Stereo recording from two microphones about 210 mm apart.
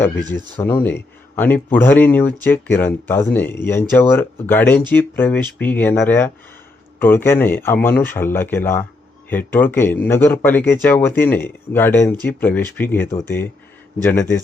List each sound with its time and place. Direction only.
0.3 s speech: 20° right (ahead or behind)
0.6 s speech: 10° left (ahead or behind)